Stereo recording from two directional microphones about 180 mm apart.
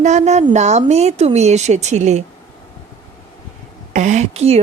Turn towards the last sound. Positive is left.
turn(degrees=-35)  # may be behind; listen again after turning